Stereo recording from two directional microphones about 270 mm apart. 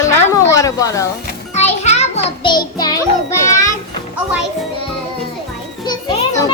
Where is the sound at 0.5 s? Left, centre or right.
Centre.